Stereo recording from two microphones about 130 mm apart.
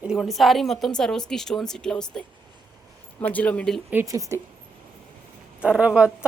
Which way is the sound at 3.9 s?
20° right (ahead or behind).